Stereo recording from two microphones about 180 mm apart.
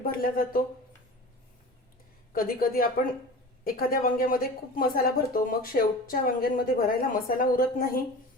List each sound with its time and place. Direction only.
0.0 s a woman's voice: 55° left (ahead or behind)
2.3 s a woman's voice: 50° left (ahead or behind)